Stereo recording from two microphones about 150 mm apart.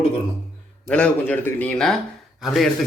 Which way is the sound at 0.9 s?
10° left (ahead or behind).